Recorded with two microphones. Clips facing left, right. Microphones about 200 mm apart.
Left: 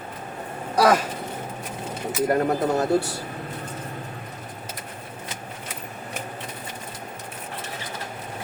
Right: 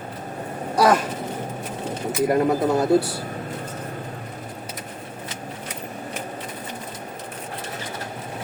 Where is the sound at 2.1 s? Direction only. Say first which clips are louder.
Right 2 dB; centre (ahead or behind).